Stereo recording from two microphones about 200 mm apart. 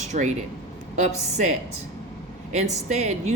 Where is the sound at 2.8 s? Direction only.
35° right (ahead or behind).